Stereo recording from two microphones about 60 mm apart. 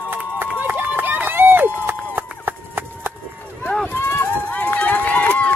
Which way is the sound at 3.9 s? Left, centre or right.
Left.